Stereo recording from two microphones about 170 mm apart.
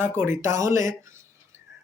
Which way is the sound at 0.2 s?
15° right (ahead or behind).